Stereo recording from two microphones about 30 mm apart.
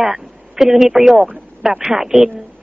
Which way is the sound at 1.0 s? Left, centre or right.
Right.